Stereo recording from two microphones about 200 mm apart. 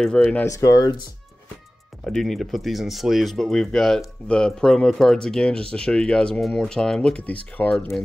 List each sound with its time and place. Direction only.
0.0 s speech: 5° left (ahead or behind)
2.0 s speech: centre (ahead or behind)